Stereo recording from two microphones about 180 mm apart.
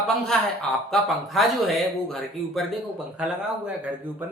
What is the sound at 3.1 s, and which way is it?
Speech, 5° right (ahead or behind).